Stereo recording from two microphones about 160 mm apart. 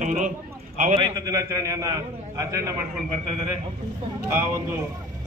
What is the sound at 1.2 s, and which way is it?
A man's voice, 25° right (ahead or behind).